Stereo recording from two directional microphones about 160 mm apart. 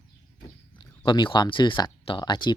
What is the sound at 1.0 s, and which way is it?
Speech, 30° left (ahead or behind).